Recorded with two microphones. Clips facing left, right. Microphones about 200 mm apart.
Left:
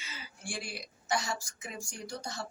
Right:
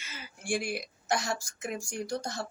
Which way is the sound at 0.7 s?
50° right (ahead or behind).